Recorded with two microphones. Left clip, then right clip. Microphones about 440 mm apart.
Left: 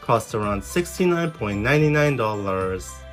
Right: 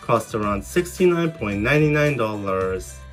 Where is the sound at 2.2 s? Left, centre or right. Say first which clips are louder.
Right 1 dB; left.